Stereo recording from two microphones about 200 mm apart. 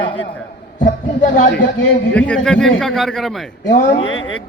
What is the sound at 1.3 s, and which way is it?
Speech, 60° left (ahead or behind).